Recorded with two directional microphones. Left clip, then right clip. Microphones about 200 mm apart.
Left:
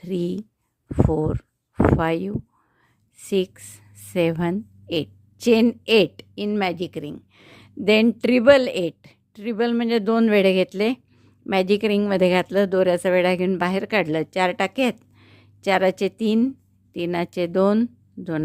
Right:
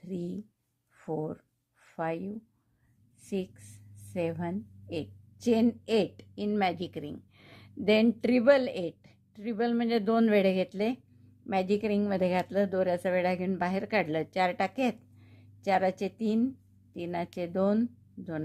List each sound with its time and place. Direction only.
0.0 s a woman's voice: 40° left (ahead or behind)